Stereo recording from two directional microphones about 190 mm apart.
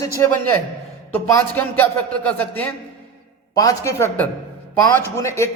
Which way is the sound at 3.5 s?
20° left (ahead or behind).